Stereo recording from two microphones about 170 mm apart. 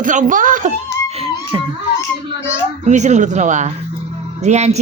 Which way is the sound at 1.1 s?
35° right (ahead or behind).